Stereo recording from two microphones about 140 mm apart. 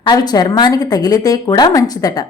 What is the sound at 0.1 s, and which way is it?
A woman's voice, 30° left (ahead or behind).